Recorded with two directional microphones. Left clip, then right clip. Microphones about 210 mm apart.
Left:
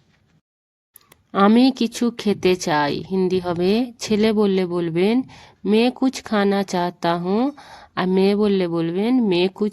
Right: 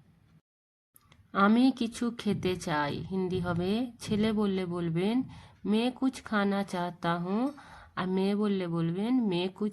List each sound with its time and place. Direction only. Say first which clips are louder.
1.1 s speech: left 9 dB; 45° left (ahead or behind)